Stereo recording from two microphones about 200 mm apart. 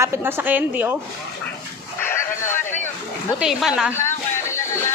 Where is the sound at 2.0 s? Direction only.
10° left (ahead or behind).